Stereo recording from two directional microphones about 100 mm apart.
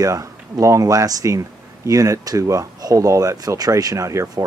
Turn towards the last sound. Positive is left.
turn(degrees=-30)  # may be behind; listen again after turning